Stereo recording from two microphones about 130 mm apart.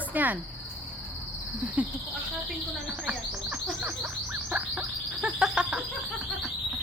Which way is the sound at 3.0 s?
10° right (ahead or behind).